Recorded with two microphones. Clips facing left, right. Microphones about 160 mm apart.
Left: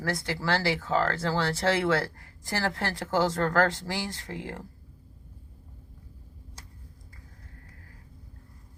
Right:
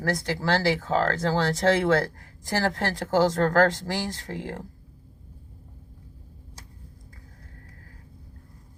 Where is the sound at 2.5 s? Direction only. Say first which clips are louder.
Right 4 dB; 45° right (ahead or behind).